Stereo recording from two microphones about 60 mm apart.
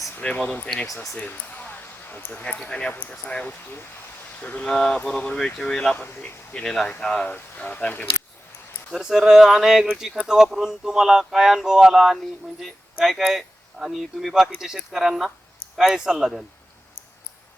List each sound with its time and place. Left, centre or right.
0.2 s speech: left
0.7 s mantra: centre
1.1 s basketball bounce: left
2.4 s speech: centre
4.6 s mantra: centre
5.5 s mantra: centre
6.0 s speech: left
6.6 s mantra: centre
7.3 s speech: left
8.9 s speech: centre